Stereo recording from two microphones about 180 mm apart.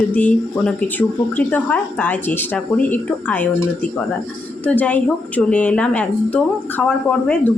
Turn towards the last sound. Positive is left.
turn(degrees=5)  # may be behind; listen again after turning